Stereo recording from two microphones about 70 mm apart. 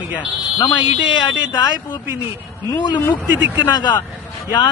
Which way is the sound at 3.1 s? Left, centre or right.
Left.